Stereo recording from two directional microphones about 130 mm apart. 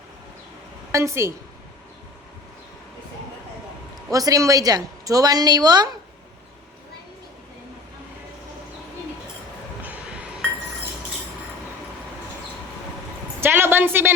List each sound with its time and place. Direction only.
0.9 s a woman's voice: 20° right (ahead or behind)
4.1 s a woman's voice: 25° right (ahead or behind)
13.4 s a sound: 15° right (ahead or behind)